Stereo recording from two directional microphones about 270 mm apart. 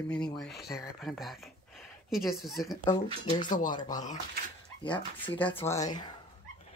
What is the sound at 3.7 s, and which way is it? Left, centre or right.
Speech, centre.